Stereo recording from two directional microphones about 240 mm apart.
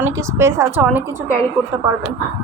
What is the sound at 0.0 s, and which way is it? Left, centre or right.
Speech, centre.